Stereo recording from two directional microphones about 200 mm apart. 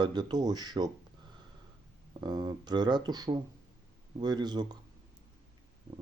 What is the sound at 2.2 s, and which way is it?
Speech, 20° right (ahead or behind).